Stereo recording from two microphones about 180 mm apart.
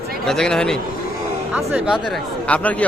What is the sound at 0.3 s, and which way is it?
Speech, 5° left (ahead or behind).